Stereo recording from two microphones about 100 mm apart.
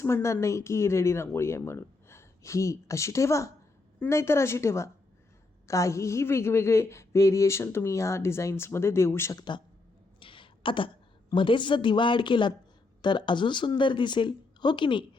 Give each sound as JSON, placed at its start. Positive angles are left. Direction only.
{"t": 0.0, "sound": "speech", "side_deg": 30}
{"t": 9.4, "sound": "speech", "side_deg": 50}
{"t": 10.2, "sound": "throat clearing", "side_deg": 60}
{"t": 11.3, "sound": "speech", "side_deg": 55}